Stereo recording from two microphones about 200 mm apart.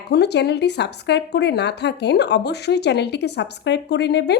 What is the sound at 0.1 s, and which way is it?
A woman's voice, 55° left (ahead or behind).